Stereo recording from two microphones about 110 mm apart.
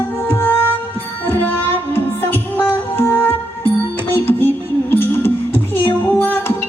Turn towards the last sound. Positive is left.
turn(degrees=20)  # may be behind; listen again after turning